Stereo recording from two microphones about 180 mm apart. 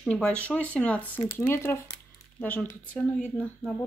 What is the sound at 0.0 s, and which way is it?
A woman's voice, 5° left (ahead or behind).